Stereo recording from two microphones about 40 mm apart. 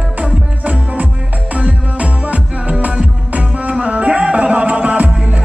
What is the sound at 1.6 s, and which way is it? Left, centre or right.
Music, right.